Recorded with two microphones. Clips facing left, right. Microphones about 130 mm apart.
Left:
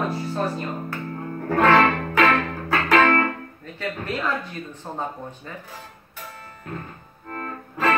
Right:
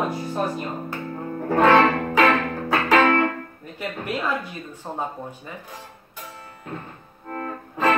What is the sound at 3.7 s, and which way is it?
Speech, 15° right (ahead or behind).